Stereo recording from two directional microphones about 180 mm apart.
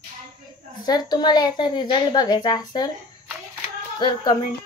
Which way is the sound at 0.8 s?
25° left (ahead or behind).